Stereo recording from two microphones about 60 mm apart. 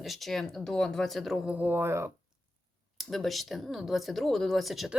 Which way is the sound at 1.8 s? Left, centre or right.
Right.